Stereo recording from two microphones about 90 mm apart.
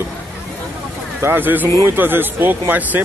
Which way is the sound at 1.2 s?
25° right (ahead or behind).